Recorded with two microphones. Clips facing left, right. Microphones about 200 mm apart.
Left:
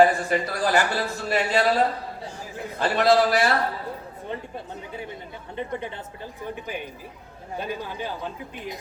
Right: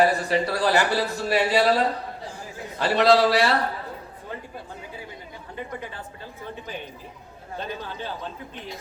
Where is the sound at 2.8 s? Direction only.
50° left (ahead or behind).